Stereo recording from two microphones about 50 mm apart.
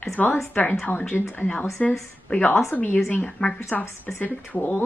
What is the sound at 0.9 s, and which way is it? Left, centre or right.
Speech, left.